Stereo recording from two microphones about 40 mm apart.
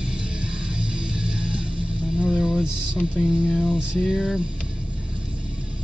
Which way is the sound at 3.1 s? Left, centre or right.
Right.